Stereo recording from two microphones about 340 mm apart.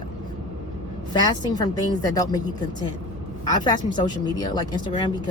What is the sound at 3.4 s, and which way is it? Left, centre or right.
Speech, centre.